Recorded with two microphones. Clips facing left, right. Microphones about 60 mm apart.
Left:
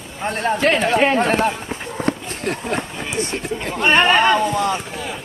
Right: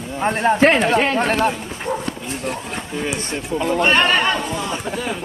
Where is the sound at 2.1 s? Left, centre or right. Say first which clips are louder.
Left 3 dB; left.